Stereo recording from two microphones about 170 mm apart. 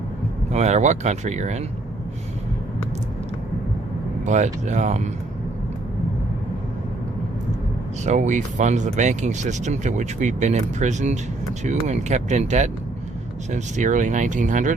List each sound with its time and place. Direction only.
0.5 s speech: 40° right (ahead or behind)
4.3 s speech: 45° right (ahead or behind)
8.0 s speech: 45° right (ahead or behind)